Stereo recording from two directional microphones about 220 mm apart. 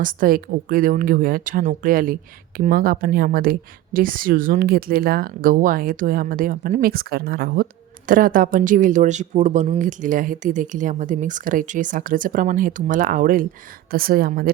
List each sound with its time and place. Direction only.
0.0 s speech: 40° right (ahead or behind)